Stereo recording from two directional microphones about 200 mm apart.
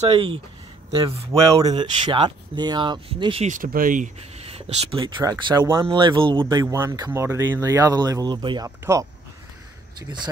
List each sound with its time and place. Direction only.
0.1 s speech: 30° right (ahead or behind)
6.4 s speech: 15° right (ahead or behind)